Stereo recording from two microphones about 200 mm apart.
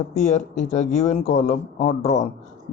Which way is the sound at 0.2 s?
35° left (ahead or behind).